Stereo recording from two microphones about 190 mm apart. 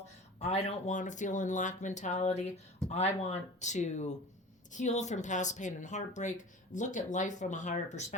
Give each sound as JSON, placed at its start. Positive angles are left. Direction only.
{"t": 0.0, "sound": "speech", "side_deg": 35}